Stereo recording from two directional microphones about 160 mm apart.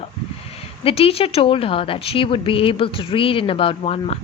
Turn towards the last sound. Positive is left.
turn(degrees=40)  # may be behind; listen again after turning